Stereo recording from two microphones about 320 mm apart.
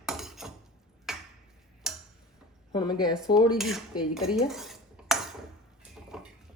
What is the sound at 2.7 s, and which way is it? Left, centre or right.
Speech, centre.